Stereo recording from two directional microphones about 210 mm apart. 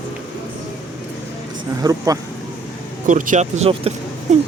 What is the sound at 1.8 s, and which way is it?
Speech, 15° right (ahead or behind).